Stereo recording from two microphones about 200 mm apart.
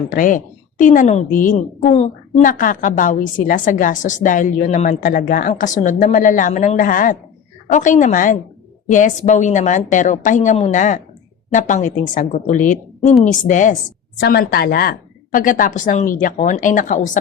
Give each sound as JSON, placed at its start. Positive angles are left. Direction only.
{"t": 0.1, "sound": "a woman's voice", "side_deg": 40}
{"t": 14.2, "sound": "a woman's voice", "side_deg": 50}